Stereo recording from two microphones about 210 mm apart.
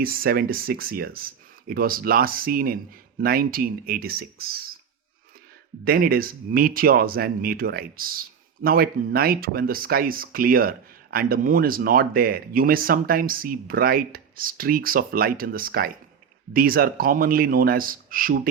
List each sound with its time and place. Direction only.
0.0 s speech: 45° right (ahead or behind)
5.8 s speech: 45° right (ahead or behind)